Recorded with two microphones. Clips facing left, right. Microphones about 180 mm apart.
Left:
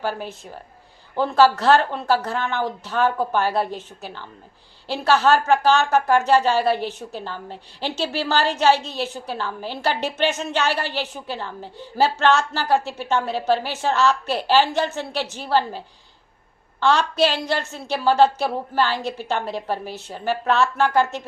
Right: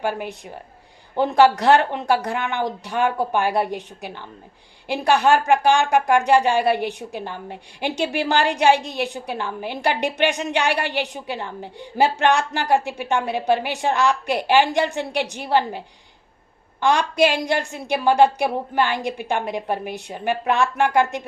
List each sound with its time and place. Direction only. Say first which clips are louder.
0.0 s speech: right 2 dB; 15° right (ahead or behind)
16.8 s speech: right 1 dB; 15° right (ahead or behind)